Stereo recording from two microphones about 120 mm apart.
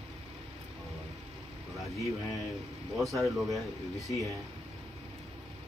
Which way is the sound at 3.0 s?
Centre (ahead or behind).